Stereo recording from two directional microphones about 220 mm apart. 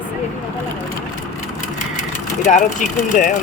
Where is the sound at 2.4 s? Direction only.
35° left (ahead or behind).